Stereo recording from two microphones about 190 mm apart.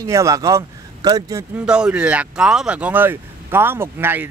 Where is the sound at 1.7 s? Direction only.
5° right (ahead or behind).